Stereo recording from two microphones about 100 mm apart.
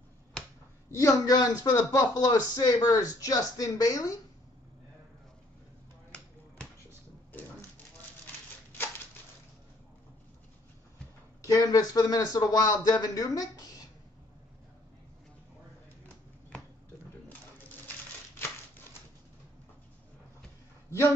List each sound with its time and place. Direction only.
0.4 s finger snapping: 5° left (ahead or behind)
0.8 s speech: 35° left (ahead or behind)
8.7 s a sound: 20° left (ahead or behind)
11.4 s speech: 35° left (ahead or behind)